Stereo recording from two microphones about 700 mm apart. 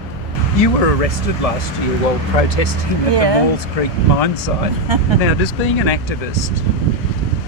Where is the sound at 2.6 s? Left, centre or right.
Left.